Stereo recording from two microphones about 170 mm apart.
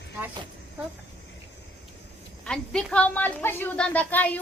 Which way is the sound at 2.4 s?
5° left (ahead or behind).